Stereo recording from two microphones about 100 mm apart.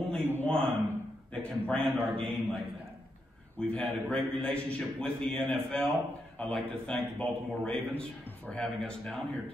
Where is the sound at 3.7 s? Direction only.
10° left (ahead or behind).